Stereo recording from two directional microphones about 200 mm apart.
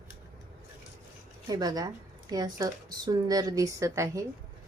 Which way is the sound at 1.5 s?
20° right (ahead or behind).